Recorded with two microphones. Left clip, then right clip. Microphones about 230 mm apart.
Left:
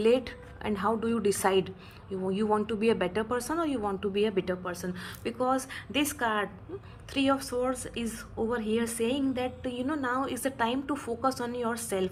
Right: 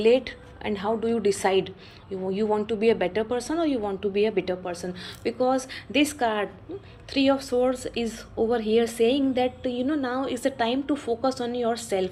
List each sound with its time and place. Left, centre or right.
0.0 s a woman's voice: left